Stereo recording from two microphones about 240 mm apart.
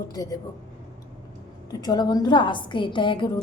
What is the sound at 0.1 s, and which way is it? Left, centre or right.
Speech, centre.